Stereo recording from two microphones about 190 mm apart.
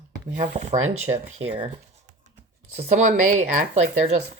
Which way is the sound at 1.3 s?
30° right (ahead or behind).